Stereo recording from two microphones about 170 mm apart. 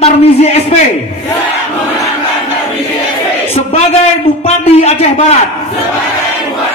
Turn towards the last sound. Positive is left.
turn(degrees=40)  # may be behind; listen again after turning